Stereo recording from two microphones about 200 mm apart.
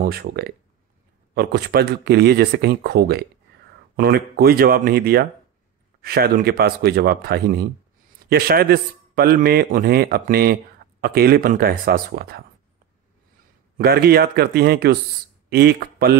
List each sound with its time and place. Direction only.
0.0 s a man's voice: 50° right (ahead or behind)
13.7 s a man's voice: 50° right (ahead or behind)